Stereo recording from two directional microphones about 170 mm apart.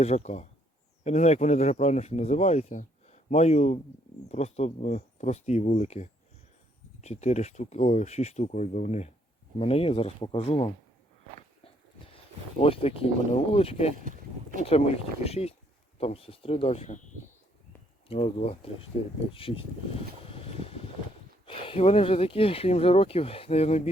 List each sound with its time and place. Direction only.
0.0 s speech: 40° left (ahead or behind)
12.1 s a sound: 35° left (ahead or behind)
13.5 s speech: 35° left (ahead or behind)
14.0 s boat: 50° right (ahead or behind)
14.6 s speech: 35° left (ahead or behind)
18.1 s speech: 35° left (ahead or behind)
18.9 s speech: 50° left (ahead or behind)
19.3 s speech: 30° left (ahead or behind)
20.2 s boat: 35° left (ahead or behind)
21.4 s speech: 30° left (ahead or behind)